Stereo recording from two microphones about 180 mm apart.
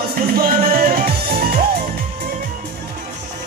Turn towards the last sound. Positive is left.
turn(degrees=-60)  # may be behind; listen again after turning